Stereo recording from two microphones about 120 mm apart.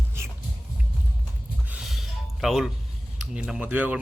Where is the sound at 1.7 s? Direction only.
Centre (ahead or behind).